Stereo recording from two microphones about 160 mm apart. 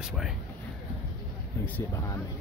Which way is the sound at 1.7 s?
20° left (ahead or behind).